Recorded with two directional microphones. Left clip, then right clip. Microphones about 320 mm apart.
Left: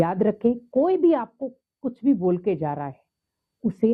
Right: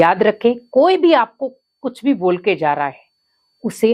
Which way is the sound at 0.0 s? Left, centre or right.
Centre.